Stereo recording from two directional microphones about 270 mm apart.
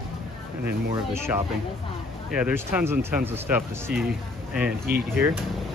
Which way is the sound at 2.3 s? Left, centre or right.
Centre.